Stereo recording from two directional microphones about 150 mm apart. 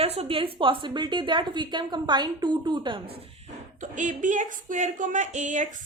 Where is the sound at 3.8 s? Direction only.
55° right (ahead or behind).